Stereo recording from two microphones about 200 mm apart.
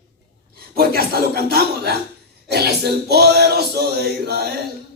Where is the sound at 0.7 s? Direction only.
50° right (ahead or behind).